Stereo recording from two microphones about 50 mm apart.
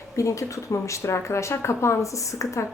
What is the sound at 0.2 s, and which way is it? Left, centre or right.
Speech, left.